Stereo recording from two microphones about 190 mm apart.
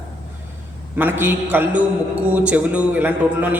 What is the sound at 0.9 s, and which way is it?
A man's voice, 10° right (ahead or behind).